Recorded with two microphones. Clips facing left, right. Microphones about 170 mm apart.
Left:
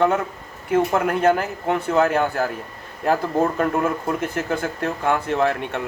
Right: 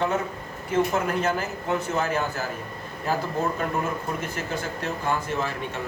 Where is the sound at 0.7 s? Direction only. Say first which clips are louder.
Left 4 dB; 55° left (ahead or behind).